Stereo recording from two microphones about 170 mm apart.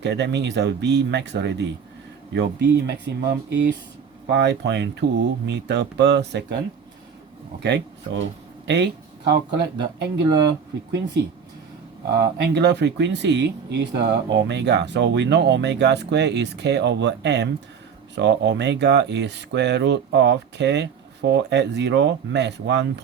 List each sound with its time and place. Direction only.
0.0 s speech: 90° right
8.6 s speech: 90° right
12.1 s speech: 70° right (ahead or behind); by 22.9 s 90° right